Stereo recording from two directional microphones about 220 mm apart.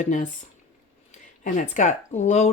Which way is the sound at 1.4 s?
35° left (ahead or behind).